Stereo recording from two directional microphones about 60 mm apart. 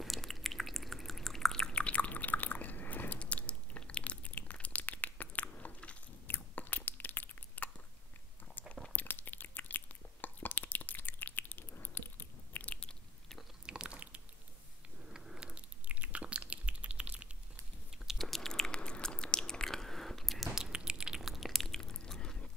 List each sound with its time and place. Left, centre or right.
0.0 s drip: centre; by 5.9 s left
6.2 s biting: left
8.9 s biting: left
13.7 s a sound: centre
15.9 s chewing: right
17.9 s chewing: centre